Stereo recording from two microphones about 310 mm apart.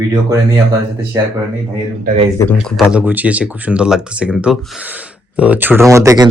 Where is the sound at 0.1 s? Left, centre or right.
Centre.